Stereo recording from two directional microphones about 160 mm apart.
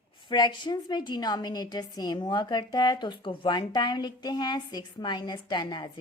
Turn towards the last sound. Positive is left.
turn(degrees=30)  # may be behind; listen again after turning